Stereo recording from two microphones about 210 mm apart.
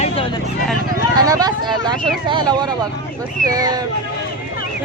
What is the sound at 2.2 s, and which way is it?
A man's voice, 20° right (ahead or behind).